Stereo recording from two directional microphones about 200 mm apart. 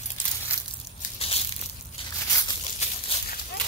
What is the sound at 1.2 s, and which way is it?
Crushing, 30° left (ahead or behind).